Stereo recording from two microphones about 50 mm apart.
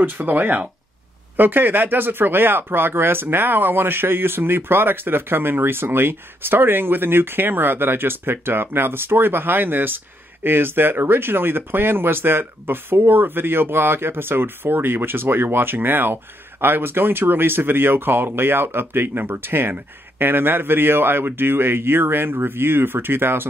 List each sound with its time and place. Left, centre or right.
0.0 s speech: right